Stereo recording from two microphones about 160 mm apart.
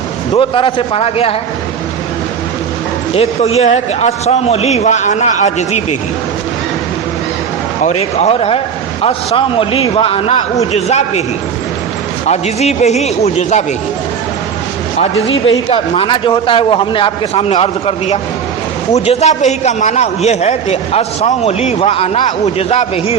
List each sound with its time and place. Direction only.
0.3 s a man's voice: 35° left (ahead or behind)
3.2 s a man's voice: 40° left (ahead or behind)
7.9 s a man's voice: 40° left (ahead or behind)
12.3 s a man's voice: 45° left (ahead or behind)
14.9 s a man's voice: 35° left (ahead or behind)